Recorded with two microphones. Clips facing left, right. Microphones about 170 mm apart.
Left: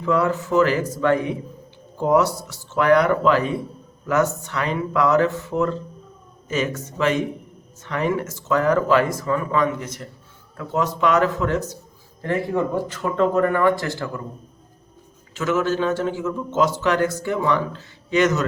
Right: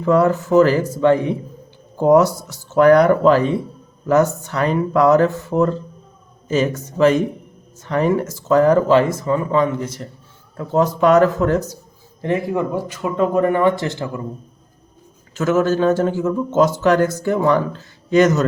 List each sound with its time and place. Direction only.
0.0 s speech: 40° right (ahead or behind)
2.0 s speech: 45° right (ahead or behind)
12.2 s speech: 15° right (ahead or behind)
15.4 s a man's voice: 45° right (ahead or behind)